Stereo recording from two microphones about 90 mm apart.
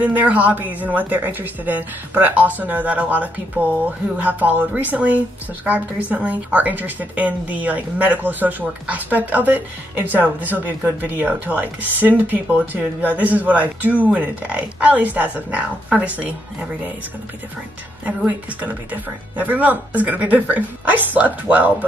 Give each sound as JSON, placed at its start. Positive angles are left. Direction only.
{"t": 0.0, "sound": "speech", "side_deg": -20}
{"t": 18.0, "sound": "speech", "side_deg": -20}